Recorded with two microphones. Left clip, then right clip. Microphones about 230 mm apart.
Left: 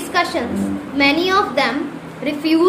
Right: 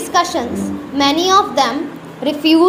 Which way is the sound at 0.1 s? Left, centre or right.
Centre.